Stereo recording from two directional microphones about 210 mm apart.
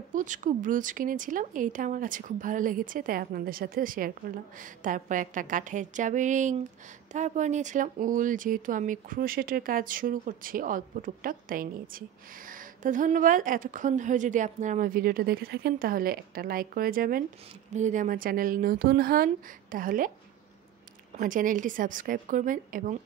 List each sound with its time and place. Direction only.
0.1 s speech: 40° right (ahead or behind)
21.2 s speech: 40° right (ahead or behind)